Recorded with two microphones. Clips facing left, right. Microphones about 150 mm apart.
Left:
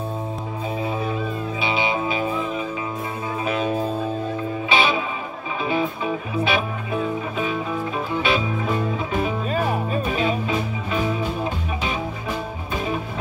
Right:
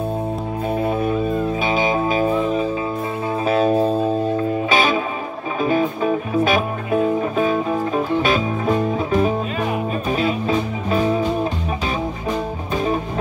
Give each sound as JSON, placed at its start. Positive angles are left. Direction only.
{"t": 0.7, "sound": "music", "side_deg": -55}
{"t": 1.6, "sound": "music", "side_deg": -45}